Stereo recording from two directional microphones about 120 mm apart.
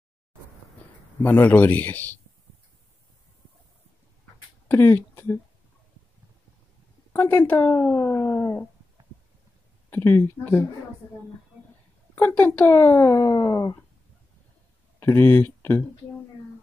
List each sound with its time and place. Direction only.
1.2 s speech: 15° left (ahead or behind)
4.6 s speech: 15° left (ahead or behind)
7.1 s speech: 20° left (ahead or behind)
9.8 s speech: 15° left (ahead or behind)
12.2 s speech: 15° left (ahead or behind)
15.0 s speech: 20° left (ahead or behind)